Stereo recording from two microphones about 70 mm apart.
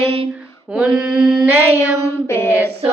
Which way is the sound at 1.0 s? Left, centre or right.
Centre.